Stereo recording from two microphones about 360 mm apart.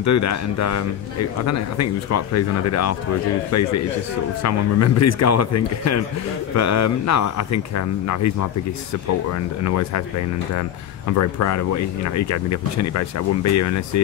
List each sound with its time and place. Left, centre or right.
0.0 s speech: left
9.6 s speech: left
11.1 s speech: left